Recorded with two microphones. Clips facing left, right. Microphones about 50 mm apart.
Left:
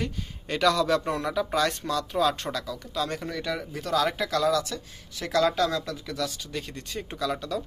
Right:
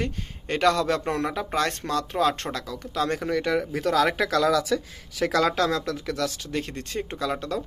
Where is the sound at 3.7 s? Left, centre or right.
Right.